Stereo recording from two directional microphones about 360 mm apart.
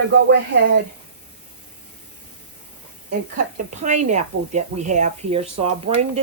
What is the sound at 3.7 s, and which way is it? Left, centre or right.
A woman's voice, centre.